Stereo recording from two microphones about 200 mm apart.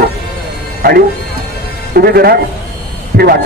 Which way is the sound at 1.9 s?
50° right (ahead or behind).